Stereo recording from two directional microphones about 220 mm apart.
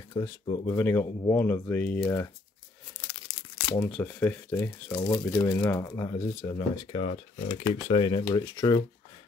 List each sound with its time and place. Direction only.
0.1 s speech: 15° left (ahead or behind)